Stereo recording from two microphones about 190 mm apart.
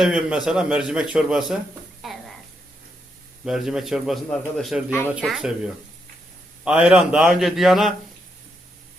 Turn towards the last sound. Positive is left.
turn(degrees=0)  # may be behind; listen again after turning